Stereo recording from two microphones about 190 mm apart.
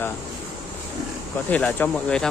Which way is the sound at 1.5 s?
5° left (ahead or behind).